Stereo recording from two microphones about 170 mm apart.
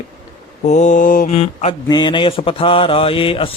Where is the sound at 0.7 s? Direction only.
45° left (ahead or behind).